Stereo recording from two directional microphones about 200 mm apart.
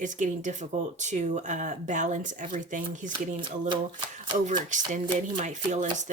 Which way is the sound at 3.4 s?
25° right (ahead or behind).